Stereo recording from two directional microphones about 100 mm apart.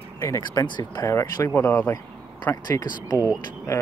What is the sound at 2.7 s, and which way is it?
Speech, 35° left (ahead or behind).